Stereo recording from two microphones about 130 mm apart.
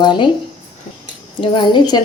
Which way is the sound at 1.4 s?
35° left (ahead or behind).